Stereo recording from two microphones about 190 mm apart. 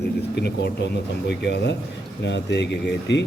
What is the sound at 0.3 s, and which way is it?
A man's voice, 60° left (ahead or behind).